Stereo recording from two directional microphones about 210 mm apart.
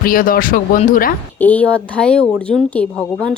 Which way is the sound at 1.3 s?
10° left (ahead or behind).